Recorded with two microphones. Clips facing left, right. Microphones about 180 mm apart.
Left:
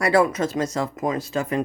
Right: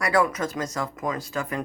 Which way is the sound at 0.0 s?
25° left (ahead or behind).